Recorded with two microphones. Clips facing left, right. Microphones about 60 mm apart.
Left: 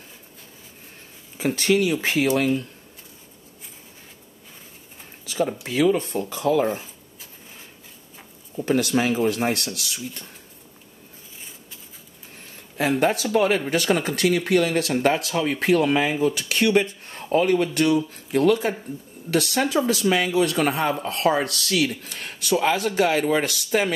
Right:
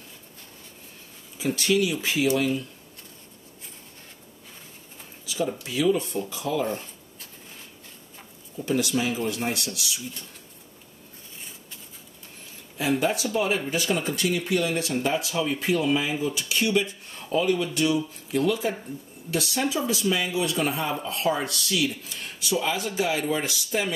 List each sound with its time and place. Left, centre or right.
1.4 s speech: left
5.2 s a sound: left
5.6 s speech: left
6.7 s a sound: centre
8.6 s speech: left
13.0 s speech: left